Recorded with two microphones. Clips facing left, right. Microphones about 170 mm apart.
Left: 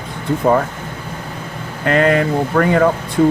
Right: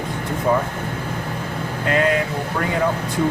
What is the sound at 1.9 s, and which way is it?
Speech, 55° left (ahead or behind).